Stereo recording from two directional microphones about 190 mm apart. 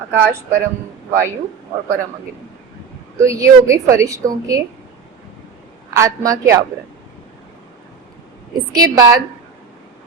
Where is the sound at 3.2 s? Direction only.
15° right (ahead or behind).